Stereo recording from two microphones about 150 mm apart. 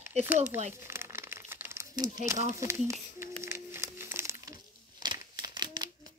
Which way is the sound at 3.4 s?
15° right (ahead or behind).